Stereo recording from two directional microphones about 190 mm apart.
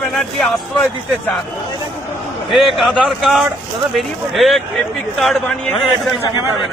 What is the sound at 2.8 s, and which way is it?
A man's voice, centre (ahead or behind).